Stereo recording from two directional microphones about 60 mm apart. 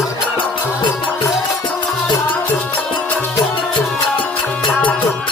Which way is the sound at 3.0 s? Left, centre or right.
Left.